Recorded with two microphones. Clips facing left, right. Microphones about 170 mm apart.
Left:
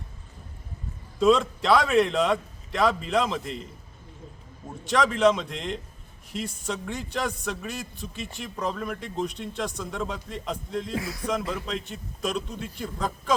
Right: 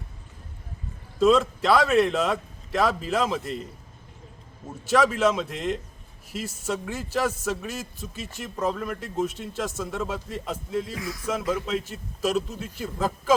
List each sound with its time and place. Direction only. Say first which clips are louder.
1.2 s a man's voice: right 1 dB; centre (ahead or behind)
4.9 s a man's voice: even; 5° right (ahead or behind)
10.9 s speech: left 3 dB; 30° left (ahead or behind)
11.3 s a man's voice: right 4 dB; 5° right (ahead or behind)